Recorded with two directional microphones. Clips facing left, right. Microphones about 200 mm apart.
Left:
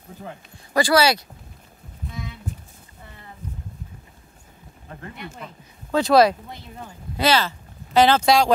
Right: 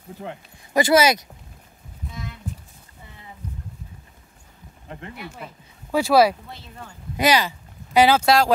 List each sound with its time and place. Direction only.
0.7 s speech: 20° right (ahead or behind)
5.1 s speech: 5° right (ahead or behind)
6.5 s speech: 15° left (ahead or behind)
7.2 s speech: 15° right (ahead or behind)